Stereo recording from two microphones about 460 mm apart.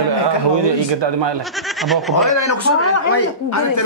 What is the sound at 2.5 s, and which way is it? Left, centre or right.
Speech, left.